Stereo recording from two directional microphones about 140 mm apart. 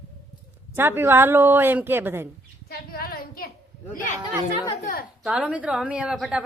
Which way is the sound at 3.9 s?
70° left (ahead or behind).